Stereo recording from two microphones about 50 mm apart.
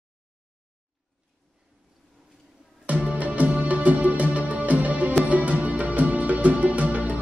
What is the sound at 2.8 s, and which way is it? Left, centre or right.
Music, right.